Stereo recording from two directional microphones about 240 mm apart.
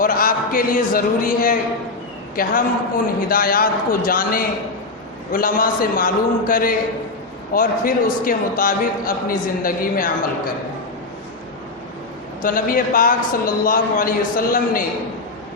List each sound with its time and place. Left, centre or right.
0.0 s a man's voice: left
12.4 s a man's voice: left